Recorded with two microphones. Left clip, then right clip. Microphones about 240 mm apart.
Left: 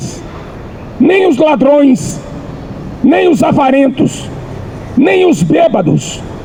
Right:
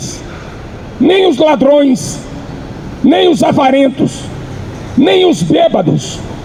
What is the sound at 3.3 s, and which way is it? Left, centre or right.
Speech, left.